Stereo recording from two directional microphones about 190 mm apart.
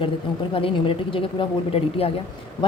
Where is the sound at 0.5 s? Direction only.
30° left (ahead or behind).